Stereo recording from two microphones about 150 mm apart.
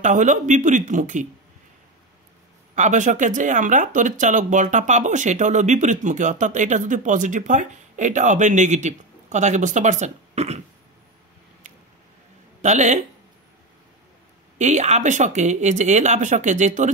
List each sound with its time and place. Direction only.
0.0 s speech: 55° right (ahead or behind)
2.7 s speech: 55° right (ahead or behind)
12.6 s speech: 50° right (ahead or behind)
14.6 s speech: 50° right (ahead or behind)